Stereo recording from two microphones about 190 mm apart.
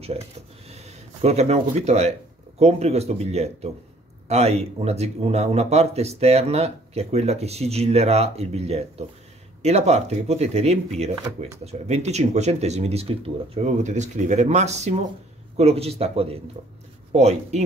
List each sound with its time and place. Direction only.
0.7 s speech: 35° right (ahead or behind)